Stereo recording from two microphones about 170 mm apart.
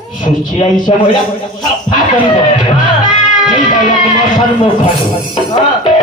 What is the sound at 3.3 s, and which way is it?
Speech, 50° left (ahead or behind).